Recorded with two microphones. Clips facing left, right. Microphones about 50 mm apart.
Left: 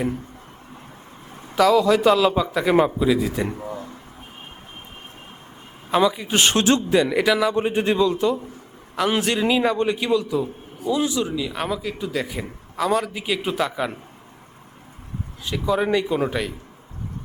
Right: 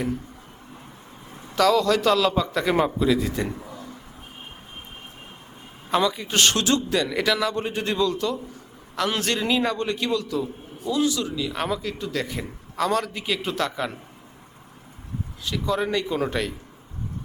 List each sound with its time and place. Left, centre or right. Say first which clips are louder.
1.5 s a man's voice: left 3 dB; centre
3.6 s a sound: left 7 dB; left
5.9 s a man's voice: left 3 dB; centre
15.4 s a man's voice: left 4 dB; centre